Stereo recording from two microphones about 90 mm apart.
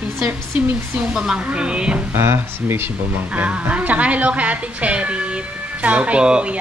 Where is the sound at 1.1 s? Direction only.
10° right (ahead or behind).